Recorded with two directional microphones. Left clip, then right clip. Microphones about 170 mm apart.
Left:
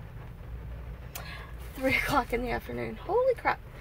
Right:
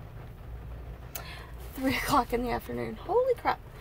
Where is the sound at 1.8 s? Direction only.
10° right (ahead or behind).